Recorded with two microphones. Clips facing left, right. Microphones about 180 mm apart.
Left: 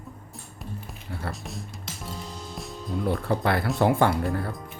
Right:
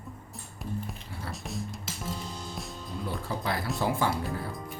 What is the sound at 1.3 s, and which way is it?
Music, centre (ahead or behind).